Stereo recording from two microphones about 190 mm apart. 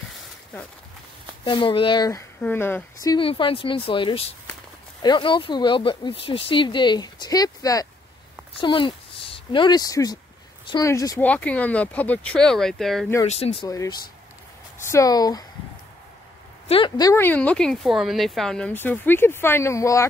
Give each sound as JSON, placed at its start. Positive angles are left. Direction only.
{"t": 1.4, "sound": "speech", "side_deg": 25}
{"t": 13.2, "sound": "speech", "side_deg": 30}
{"t": 13.7, "sound": "speech", "side_deg": 15}
{"t": 16.6, "sound": "speech", "side_deg": 25}